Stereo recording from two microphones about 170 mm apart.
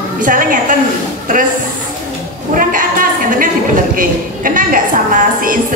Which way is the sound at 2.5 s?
55° right (ahead or behind).